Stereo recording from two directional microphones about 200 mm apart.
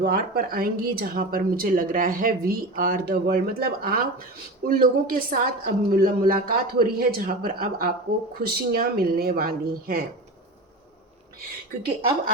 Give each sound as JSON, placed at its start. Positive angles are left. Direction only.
{"t": 0.0, "sound": "speech", "side_deg": -50}